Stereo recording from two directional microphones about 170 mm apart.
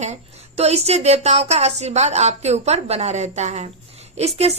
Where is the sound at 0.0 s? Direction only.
40° right (ahead or behind).